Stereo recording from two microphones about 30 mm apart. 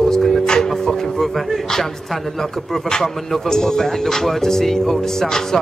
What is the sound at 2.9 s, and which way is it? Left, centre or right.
Speech, centre.